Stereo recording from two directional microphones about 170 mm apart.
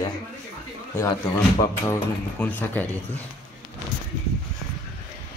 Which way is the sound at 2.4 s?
10° left (ahead or behind).